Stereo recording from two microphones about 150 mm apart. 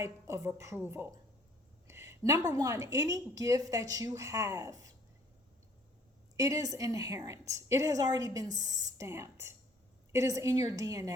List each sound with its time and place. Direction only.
0.0 s a woman's voice: 20° right (ahead or behind)
6.3 s a woman's voice: 25° right (ahead or behind)